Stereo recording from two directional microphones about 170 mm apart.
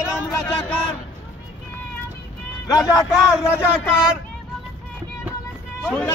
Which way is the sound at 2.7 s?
20° left (ahead or behind).